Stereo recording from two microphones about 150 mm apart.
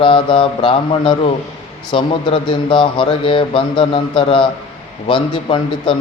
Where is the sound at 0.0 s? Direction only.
35° left (ahead or behind).